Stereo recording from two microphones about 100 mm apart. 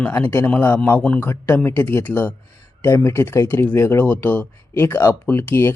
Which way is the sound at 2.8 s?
25° left (ahead or behind).